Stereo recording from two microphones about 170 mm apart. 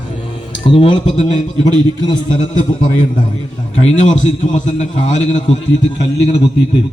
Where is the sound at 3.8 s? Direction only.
45° left (ahead or behind).